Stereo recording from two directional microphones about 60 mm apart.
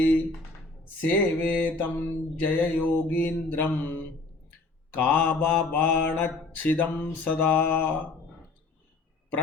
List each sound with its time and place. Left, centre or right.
1.0 s mantra: left